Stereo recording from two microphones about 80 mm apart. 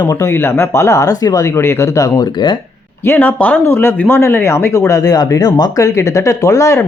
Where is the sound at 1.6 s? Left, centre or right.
Left.